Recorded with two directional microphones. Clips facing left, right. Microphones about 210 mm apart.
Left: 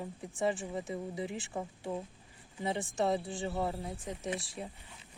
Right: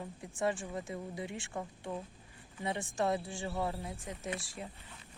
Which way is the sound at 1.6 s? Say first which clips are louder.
Left 3 dB; 15° left (ahead or behind).